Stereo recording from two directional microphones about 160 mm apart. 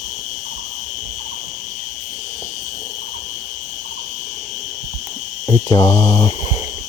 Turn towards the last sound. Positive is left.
turn(degrees=25)  # may be behind; listen again after turning